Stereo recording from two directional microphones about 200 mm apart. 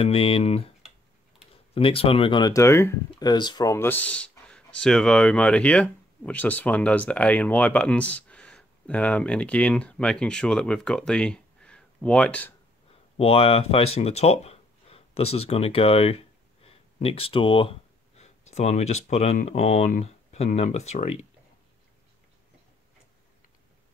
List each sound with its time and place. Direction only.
0.0 s speech: 30° left (ahead or behind)
1.7 s speech: 25° left (ahead or behind); by 12.5 s 5° left (ahead or behind)
13.2 s speech: 30° left (ahead or behind)